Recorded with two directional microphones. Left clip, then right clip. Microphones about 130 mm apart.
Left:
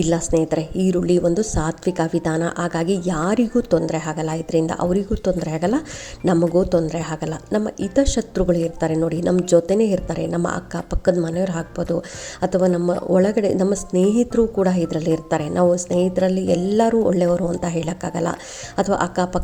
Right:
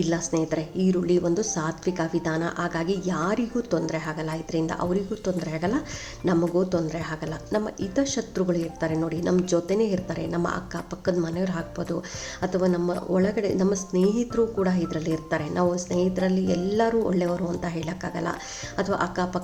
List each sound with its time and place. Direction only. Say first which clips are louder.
0.0 s speech: left 7 dB; 45° left (ahead or behind)